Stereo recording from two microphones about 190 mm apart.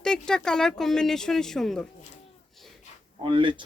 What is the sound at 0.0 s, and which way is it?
Speech, 5° left (ahead or behind).